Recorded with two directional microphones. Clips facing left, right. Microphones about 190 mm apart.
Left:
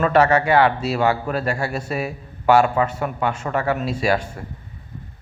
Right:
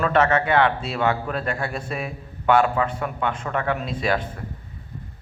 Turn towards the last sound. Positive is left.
turn(degrees=10)  # may be behind; listen again after turning